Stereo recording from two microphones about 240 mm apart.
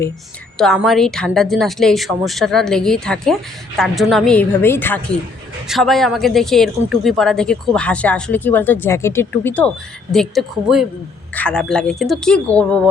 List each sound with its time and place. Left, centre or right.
0.6 s a woman's voice: centre